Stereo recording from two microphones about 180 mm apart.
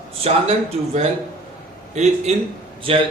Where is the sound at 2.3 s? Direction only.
35° right (ahead or behind).